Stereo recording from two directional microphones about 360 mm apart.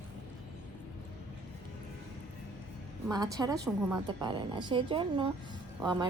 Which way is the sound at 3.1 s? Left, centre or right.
Centre.